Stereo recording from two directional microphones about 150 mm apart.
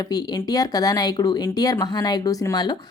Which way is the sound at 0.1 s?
25° left (ahead or behind).